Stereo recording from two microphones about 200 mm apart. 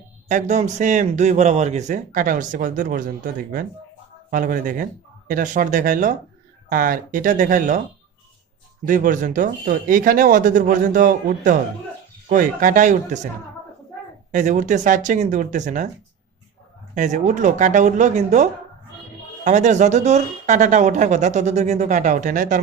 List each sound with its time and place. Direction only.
0.3 s a woman's voice: 35° right (ahead or behind)
4.3 s a woman's voice: 45° right (ahead or behind)
8.8 s a woman's voice: 40° right (ahead or behind)
14.3 s a woman's voice: 40° right (ahead or behind)
16.9 s a woman's voice: 40° right (ahead or behind)
19.5 s a woman's voice: 35° right (ahead or behind)